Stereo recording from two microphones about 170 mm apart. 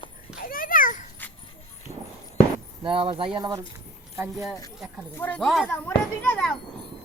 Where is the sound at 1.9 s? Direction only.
40° right (ahead or behind).